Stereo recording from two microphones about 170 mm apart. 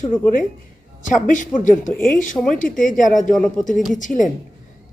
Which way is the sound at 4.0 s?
50° left (ahead or behind).